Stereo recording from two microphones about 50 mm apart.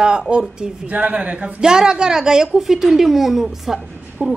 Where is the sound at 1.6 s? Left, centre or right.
Centre.